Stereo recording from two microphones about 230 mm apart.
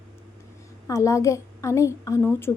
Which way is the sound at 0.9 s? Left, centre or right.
Centre.